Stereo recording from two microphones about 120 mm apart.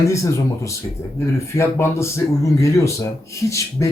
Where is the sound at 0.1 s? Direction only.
25° left (ahead or behind).